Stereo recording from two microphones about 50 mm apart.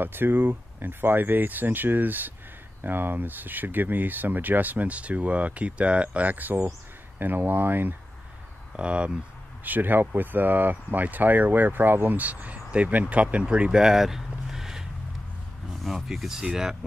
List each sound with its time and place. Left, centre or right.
0.0 s speech: right
8.7 s speech: right
9.7 s speech: right; by 16.4 s centre